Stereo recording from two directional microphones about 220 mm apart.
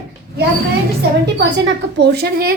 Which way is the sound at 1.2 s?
50° right (ahead or behind).